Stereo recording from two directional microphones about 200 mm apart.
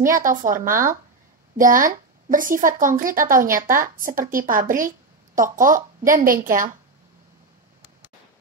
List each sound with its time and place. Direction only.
0.0 s speech: 40° right (ahead or behind)